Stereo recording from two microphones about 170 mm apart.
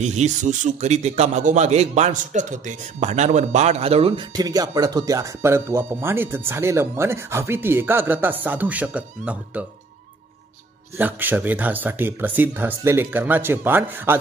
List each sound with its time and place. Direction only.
0.0 s a man's voice: 45° right (ahead or behind); by 9.7 s 10° right (ahead or behind)
11.0 s speech: 10° right (ahead or behind)